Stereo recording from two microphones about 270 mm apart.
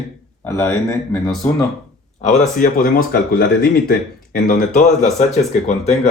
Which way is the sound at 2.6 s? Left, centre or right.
Left.